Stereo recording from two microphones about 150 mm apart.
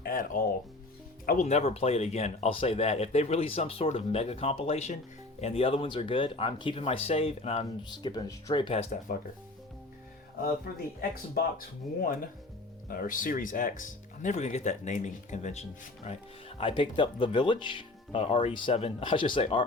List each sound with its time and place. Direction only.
0.0 s speech: 65° left (ahead or behind)
1.5 s speech: 45° left (ahead or behind)
8.0 s speech: 25° left (ahead or behind)
10.7 s speech: 90° left; by 16.2 s 45° left (ahead or behind)
16.6 s speech: 35° left (ahead or behind)